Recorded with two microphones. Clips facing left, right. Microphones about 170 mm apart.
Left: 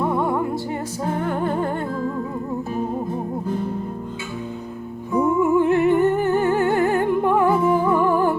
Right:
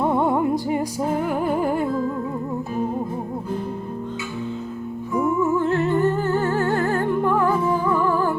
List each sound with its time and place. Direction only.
0.0 s music: 20° right (ahead or behind)
1.2 s music: 5° right (ahead or behind)
5.1 s music: 15° left (ahead or behind)